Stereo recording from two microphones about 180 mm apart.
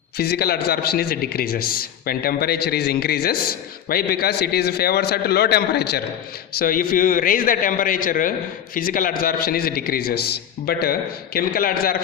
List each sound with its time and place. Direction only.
0.2 s a man's voice: 60° left (ahead or behind)
6.6 s a man's voice: 50° left (ahead or behind)